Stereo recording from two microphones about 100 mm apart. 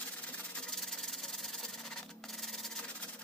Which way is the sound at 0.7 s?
5° left (ahead or behind).